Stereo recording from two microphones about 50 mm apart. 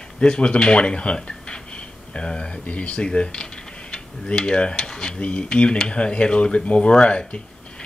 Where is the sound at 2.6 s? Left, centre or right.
Left.